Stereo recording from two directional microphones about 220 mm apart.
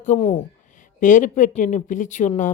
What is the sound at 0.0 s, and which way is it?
Speech, 30° left (ahead or behind).